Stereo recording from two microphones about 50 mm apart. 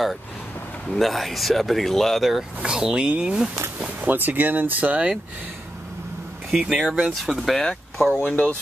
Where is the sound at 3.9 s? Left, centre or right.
Right.